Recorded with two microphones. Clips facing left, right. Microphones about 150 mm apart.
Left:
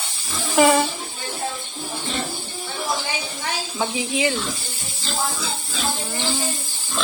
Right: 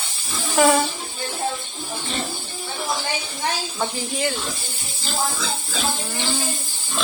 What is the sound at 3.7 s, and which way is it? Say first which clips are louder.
Speech: left 2 dB; centre (ahead or behind).